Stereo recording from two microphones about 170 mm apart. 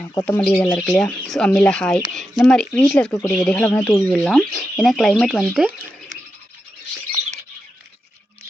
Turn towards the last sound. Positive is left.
turn(degrees=-40)  # may be behind; listen again after turning